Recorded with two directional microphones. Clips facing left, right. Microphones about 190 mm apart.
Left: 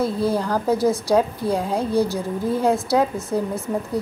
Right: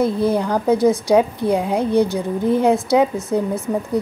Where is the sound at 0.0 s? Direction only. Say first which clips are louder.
Right 3 dB; 20° right (ahead or behind).